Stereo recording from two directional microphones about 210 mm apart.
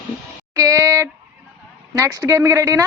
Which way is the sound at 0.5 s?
15° right (ahead or behind).